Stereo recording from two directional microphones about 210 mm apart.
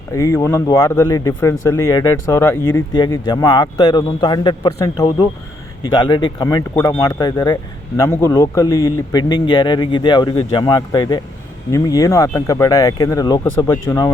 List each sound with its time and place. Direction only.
0.1 s speech: 15° left (ahead or behind)